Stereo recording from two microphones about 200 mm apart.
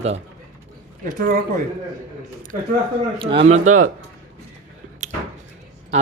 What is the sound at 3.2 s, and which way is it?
Speech, 25° right (ahead or behind).